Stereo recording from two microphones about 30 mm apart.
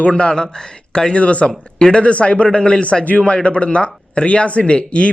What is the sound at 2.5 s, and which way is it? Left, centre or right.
Speech, left.